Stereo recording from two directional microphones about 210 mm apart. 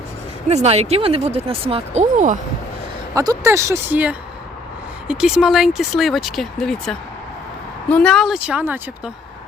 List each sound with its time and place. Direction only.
0.4 s speech: 30° right (ahead or behind)
3.2 s speech: 15° right (ahead or behind)